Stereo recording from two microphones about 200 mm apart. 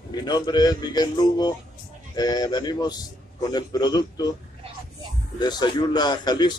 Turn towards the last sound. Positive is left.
turn(degrees=20)  # may be behind; listen again after turning